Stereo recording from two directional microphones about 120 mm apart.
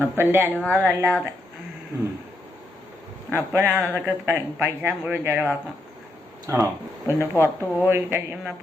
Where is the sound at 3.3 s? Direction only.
20° right (ahead or behind).